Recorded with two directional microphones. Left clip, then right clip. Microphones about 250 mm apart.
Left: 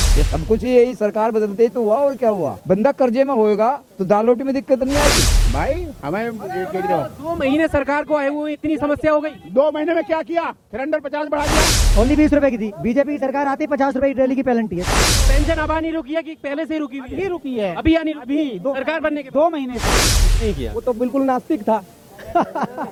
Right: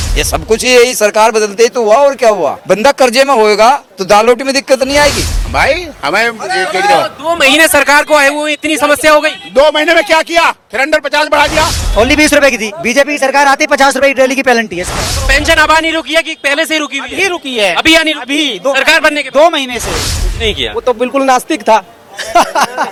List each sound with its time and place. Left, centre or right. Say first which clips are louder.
0.6 s a man's voice: right 9 dB; centre
1.7 s speech: right 10 dB; right
2.0 s a man's voice: right 11 dB; centre
2.3 s speech: right 9 dB; right
2.7 s a man's voice: right 8 dB; centre
21.2 s a man's voice: right 9 dB; centre